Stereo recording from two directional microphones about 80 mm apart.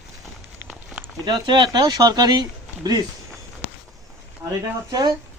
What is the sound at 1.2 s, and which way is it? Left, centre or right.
Speech, right.